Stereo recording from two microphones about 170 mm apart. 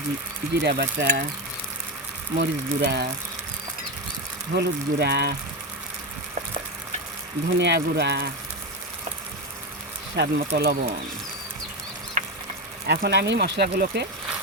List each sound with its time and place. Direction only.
0.6 s speech: 70° right (ahead or behind)
2.4 s speech: 75° right (ahead or behind)
4.5 s speech: 75° right (ahead or behind)
7.6 s speech: 90° right
10.2 s speech: 75° right (ahead or behind)
12.2 s a sound: 50° right (ahead or behind)
12.9 s speech: 85° right; by 14.1 s 65° right (ahead or behind)